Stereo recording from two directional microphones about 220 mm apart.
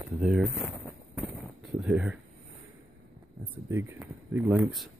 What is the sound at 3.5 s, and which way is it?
Speech, 10° right (ahead or behind).